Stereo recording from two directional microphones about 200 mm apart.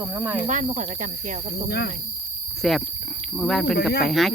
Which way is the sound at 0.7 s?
40° right (ahead or behind).